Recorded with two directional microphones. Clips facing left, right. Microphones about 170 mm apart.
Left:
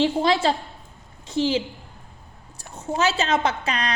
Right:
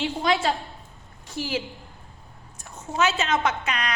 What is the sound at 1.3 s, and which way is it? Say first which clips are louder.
Speech: left 7 dB; 20° left (ahead or behind).